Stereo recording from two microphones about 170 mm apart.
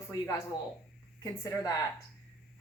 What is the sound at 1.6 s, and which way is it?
Speech, 20° left (ahead or behind).